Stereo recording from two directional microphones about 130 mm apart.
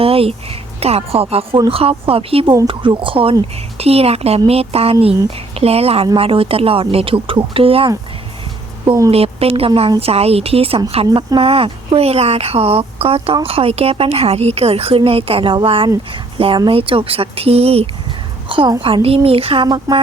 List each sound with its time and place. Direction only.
0.0 s a woman's voice: 45° right (ahead or behind)
8.8 s a woman's voice: 25° right (ahead or behind)
9.0 s a woman's voice: 50° right (ahead or behind)
18.4 s a sound: 40° right (ahead or behind)
19.0 s a woman's voice: 50° right (ahead or behind)
19.6 s speech: 30° right (ahead or behind)